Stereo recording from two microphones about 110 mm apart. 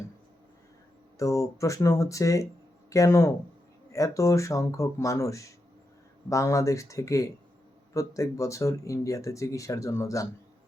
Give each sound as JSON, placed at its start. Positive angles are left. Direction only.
{"t": 1.2, "sound": "speech", "side_deg": 30}